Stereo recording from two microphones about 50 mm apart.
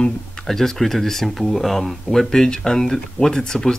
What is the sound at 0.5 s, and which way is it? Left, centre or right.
Speech, centre.